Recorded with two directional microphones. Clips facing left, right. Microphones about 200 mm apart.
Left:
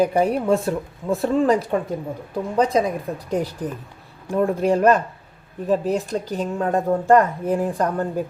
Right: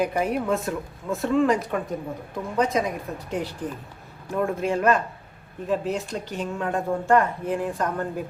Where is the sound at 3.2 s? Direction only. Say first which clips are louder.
Left 5 dB; 40° left (ahead or behind).